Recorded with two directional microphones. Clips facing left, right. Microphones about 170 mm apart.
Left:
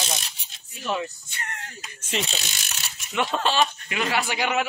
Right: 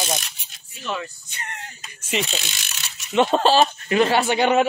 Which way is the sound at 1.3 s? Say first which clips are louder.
Right 1 dB; 20° right (ahead or behind).